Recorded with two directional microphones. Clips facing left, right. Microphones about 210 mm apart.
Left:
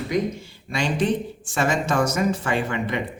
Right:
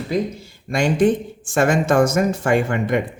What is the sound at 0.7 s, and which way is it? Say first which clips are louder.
Speech: right 6 dB; 45° right (ahead or behind).